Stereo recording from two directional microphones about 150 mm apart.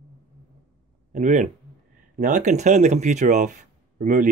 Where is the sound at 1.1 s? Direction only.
55° right (ahead or behind).